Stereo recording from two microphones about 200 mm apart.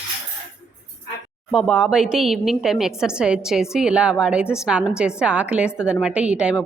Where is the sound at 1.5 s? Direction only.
Centre (ahead or behind).